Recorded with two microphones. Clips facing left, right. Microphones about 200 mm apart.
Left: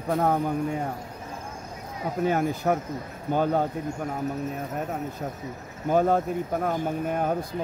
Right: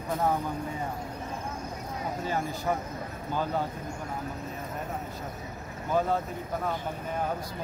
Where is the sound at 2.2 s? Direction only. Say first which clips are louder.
Left 8 dB; 60° left (ahead or behind).